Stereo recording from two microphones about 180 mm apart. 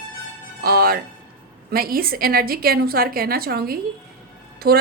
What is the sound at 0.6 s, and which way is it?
Music, 55° right (ahead or behind).